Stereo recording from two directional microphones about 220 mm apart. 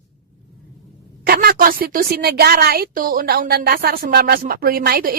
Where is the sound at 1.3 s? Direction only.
40° right (ahead or behind).